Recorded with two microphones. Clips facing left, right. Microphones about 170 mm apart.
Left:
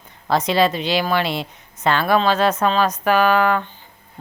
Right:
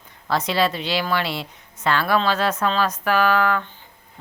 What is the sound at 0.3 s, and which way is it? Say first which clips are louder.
Speech: left 4 dB; 20° left (ahead or behind).